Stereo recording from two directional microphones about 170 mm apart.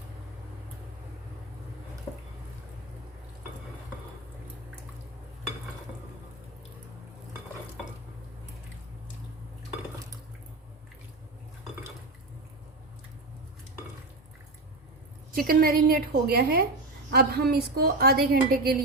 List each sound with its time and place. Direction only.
15.3 s a woman's voice: 55° right (ahead or behind)